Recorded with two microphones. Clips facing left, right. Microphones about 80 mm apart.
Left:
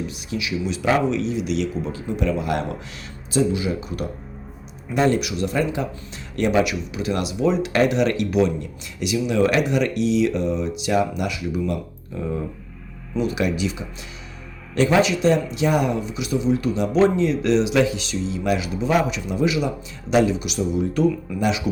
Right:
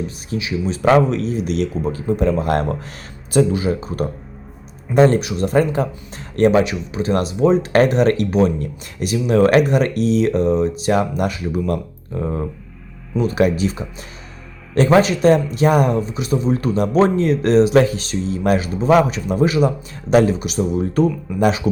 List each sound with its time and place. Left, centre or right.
0.3 s speech: right